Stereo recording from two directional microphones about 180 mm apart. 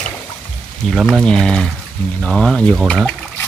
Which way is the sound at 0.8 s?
Centre (ahead or behind).